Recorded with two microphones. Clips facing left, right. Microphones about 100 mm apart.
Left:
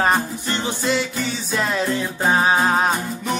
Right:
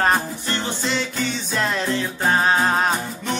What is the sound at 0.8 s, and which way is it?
Music, 5° left (ahead or behind).